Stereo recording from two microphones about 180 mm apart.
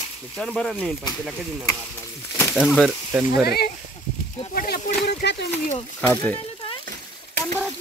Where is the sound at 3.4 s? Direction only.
60° left (ahead or behind).